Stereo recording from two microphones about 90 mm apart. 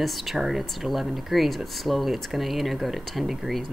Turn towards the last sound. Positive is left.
turn(degrees=0)  # may be behind; listen again after turning